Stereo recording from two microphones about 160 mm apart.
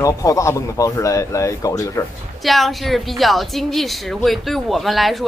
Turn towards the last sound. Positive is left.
turn(degrees=0)  # may be behind; listen again after turning